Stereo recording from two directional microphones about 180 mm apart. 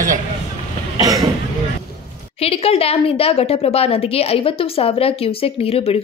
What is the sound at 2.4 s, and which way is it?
A woman's voice, 35° left (ahead or behind).